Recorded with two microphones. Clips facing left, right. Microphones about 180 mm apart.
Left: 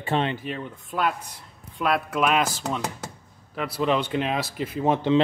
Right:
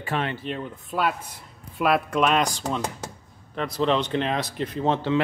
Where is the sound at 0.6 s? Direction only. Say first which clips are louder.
Right 1 dB; 5° right (ahead or behind); by 5.1 s 10° left (ahead or behind).